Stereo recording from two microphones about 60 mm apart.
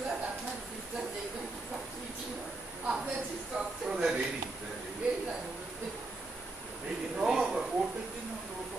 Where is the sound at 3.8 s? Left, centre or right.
Centre.